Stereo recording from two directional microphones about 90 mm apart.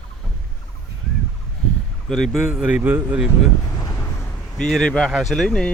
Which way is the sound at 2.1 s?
5° left (ahead or behind).